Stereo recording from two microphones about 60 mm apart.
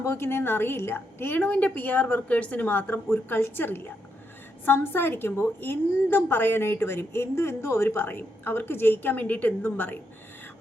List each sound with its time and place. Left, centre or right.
0.0 s a woman's voice: left
1.4 s a woman's voice: left
7.9 s a woman's voice: left